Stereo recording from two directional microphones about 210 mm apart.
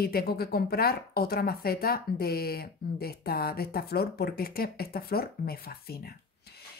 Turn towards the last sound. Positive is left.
turn(degrees=45)  # may be behind; listen again after turning